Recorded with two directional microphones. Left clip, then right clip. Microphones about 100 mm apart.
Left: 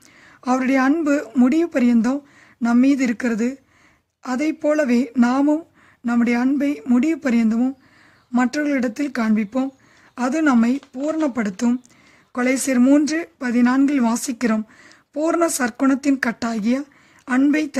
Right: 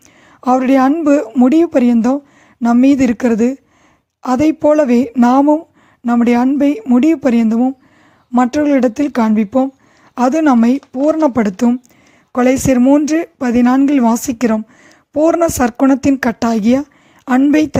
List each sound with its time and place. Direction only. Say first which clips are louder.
0.4 s speech: right 7 dB; 40° right (ahead or behind)
12.8 s speech: right 3 dB; 10° right (ahead or behind)
13.1 s speech: right 8 dB; 40° right (ahead or behind)